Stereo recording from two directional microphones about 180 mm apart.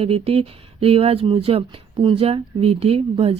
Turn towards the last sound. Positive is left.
turn(degrees=-30)  # may be behind; listen again after turning